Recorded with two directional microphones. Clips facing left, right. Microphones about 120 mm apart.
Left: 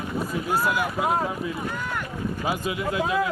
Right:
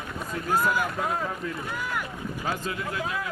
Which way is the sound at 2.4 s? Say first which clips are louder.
Left 3 dB; 15° left (ahead or behind).